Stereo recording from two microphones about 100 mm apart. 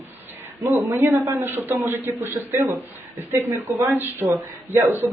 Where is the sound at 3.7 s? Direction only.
20° right (ahead or behind).